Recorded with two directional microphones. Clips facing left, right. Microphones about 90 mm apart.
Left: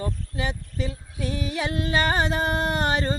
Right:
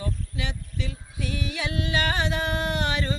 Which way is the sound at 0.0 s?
40° left (ahead or behind).